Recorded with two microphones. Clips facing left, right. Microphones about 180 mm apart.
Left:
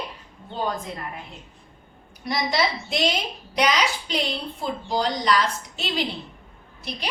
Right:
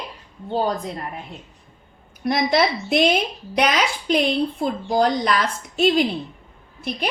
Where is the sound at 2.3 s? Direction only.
55° right (ahead or behind).